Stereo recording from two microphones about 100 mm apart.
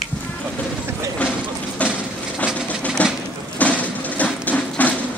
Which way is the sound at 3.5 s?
15° left (ahead or behind).